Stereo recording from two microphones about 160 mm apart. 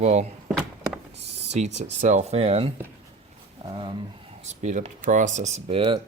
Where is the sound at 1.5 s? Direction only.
45° right (ahead or behind).